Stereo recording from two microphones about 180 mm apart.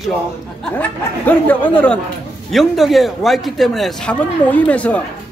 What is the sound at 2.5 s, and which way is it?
A man's voice, centre (ahead or behind).